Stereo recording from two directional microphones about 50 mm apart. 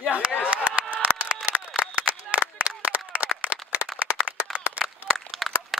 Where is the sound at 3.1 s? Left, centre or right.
Right.